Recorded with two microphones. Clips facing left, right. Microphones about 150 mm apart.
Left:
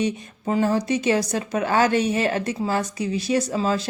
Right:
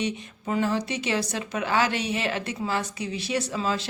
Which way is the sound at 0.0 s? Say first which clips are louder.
Left 5 dB; 40° left (ahead or behind).